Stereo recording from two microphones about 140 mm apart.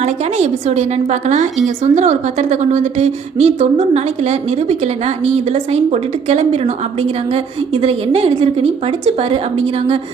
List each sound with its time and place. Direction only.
0.0 s a woman's voice: 55° right (ahead or behind)